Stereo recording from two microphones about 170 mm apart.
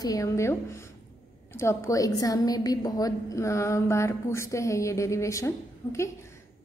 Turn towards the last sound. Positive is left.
turn(degrees=15)  # may be behind; listen again after turning